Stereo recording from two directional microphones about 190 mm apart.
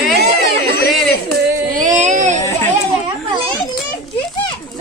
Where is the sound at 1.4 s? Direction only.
45° right (ahead or behind).